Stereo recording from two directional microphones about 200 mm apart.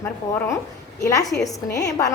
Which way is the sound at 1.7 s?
15° left (ahead or behind).